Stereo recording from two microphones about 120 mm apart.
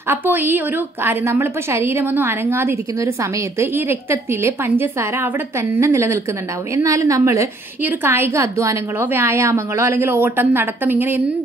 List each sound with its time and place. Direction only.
0.1 s a woman's voice: 15° right (ahead or behind)